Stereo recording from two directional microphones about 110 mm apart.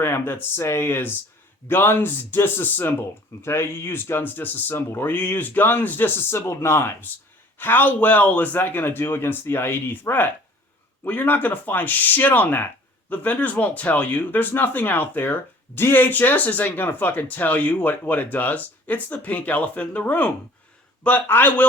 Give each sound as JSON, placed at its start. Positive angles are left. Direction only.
{"t": 0.0, "sound": "speech", "side_deg": 20}